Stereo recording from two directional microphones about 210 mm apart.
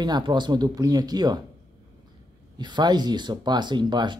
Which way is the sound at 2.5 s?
20° right (ahead or behind).